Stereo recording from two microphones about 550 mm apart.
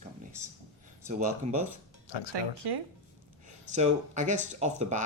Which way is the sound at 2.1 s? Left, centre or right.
Left.